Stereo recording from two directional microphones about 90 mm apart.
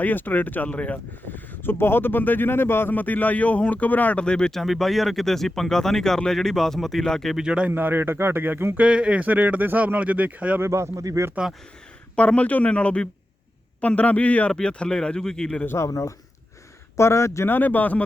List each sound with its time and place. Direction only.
0.0 s speech: 20° left (ahead or behind)
7.3 s a man's voice: 10° right (ahead or behind)
7.7 s a man's voice: 25° right (ahead or behind)
10.6 s speech: 30° right (ahead or behind)
12.1 s speech: 15° left (ahead or behind)
15.6 s speech: 30° left (ahead or behind)